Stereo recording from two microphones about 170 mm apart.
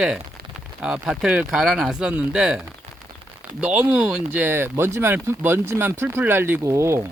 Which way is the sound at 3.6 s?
5° right (ahead or behind).